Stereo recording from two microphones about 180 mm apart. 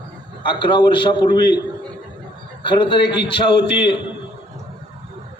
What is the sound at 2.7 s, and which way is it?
A man's voice, 30° left (ahead or behind).